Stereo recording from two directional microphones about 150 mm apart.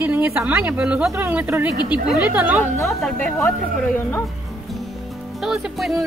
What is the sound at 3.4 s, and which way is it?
Speech, 15° left (ahead or behind).